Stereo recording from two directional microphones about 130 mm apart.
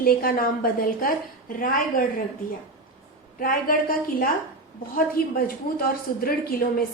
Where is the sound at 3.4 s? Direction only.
90° left.